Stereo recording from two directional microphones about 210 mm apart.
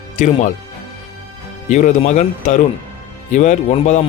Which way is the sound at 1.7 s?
35° left (ahead or behind).